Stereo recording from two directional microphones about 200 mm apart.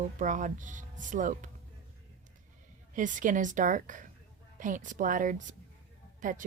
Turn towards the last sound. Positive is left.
turn(degrees=-40)  # may be behind; listen again after turning